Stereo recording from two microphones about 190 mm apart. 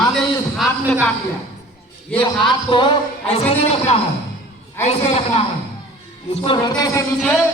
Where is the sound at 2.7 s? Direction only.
25° left (ahead or behind).